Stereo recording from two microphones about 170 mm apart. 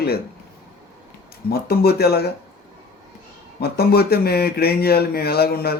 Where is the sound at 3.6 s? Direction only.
65° left (ahead or behind).